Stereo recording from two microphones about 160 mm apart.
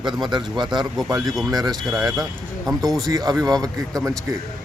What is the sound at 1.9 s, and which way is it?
Speech, centre (ahead or behind).